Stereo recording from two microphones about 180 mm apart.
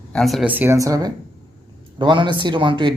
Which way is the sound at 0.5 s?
10° right (ahead or behind).